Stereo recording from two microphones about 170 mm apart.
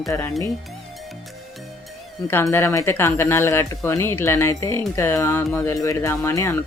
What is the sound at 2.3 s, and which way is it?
Speech, 15° left (ahead or behind).